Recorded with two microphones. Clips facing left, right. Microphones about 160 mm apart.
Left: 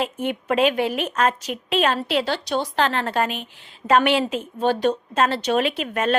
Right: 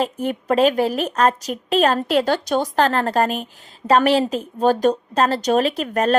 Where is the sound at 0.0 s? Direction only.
40° right (ahead or behind).